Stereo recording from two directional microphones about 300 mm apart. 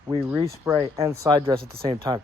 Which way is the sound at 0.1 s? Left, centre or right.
Centre.